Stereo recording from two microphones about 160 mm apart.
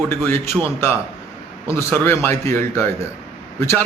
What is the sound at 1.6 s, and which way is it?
A man's voice, 15° left (ahead or behind).